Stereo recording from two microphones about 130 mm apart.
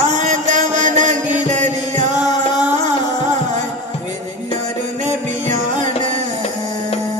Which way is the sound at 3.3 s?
65° right (ahead or behind).